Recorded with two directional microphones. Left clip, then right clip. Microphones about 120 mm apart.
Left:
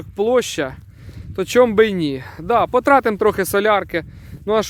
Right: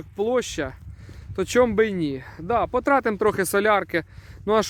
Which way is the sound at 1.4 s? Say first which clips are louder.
Left 5 dB; 30° left (ahead or behind).